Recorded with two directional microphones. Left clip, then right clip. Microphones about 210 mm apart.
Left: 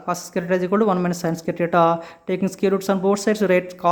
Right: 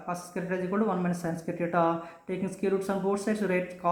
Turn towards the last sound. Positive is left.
turn(degrees=45)  # may be behind; listen again after turning